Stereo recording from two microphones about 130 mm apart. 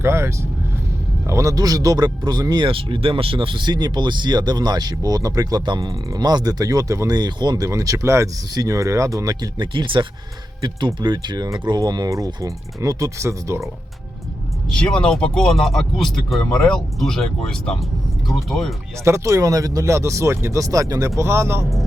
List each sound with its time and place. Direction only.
0.0 s speech: 20° right (ahead or behind)
14.7 s speech: 5° left (ahead or behind)
19.0 s speech: 20° right (ahead or behind)